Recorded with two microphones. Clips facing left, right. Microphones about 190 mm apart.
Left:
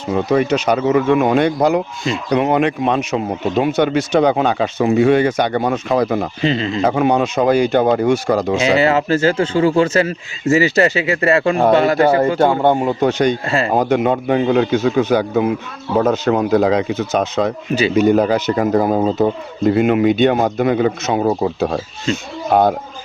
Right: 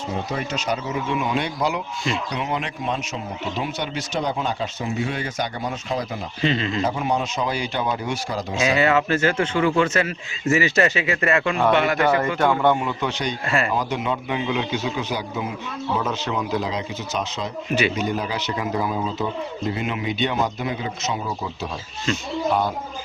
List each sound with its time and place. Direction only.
0.3 s speech: 65° left (ahead or behind)
6.4 s speech: 30° left (ahead or behind)
6.8 s speech: 65° left (ahead or behind)
8.5 s speech: 30° left (ahead or behind); by 13.3 s 45° left (ahead or behind)
13.5 s speech: 30° left (ahead or behind)
13.7 s speech: 55° left (ahead or behind)
16.0 s speech: 45° left (ahead or behind)